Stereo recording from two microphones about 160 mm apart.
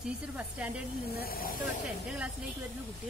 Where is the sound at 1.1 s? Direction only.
70° left (ahead or behind).